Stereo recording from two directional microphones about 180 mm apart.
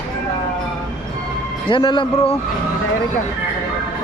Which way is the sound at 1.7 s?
30° left (ahead or behind).